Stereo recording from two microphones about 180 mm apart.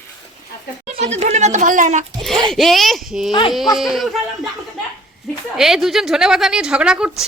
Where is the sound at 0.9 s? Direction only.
40° right (ahead or behind).